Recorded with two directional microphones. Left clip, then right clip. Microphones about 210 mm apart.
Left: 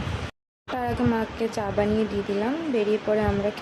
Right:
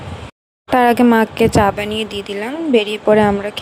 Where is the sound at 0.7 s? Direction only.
50° right (ahead or behind).